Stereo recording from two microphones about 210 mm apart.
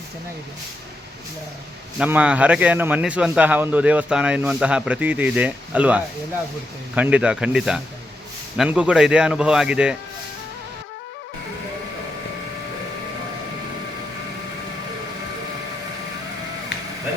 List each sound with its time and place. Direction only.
2.0 s a man's voice: 5° right (ahead or behind)